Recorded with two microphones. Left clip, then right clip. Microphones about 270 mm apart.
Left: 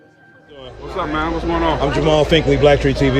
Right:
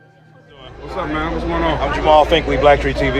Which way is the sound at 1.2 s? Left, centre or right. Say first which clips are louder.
Left 1 dB; centre.